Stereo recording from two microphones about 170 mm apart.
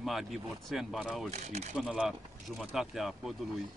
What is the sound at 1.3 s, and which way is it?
Speech, 40° right (ahead or behind).